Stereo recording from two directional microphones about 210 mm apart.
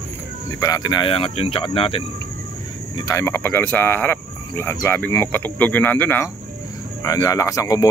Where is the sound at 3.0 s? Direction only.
15° left (ahead or behind).